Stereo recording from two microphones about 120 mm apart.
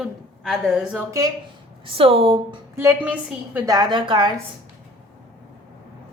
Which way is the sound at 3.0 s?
10° right (ahead or behind).